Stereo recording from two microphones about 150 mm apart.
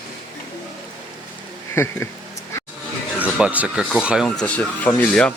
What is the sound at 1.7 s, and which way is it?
Speech, 15° left (ahead or behind).